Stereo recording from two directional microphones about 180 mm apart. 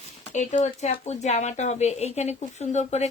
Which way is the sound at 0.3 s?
40° left (ahead or behind).